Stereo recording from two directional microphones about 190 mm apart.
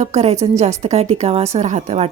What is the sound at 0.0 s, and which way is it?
A woman's voice, 35° right (ahead or behind).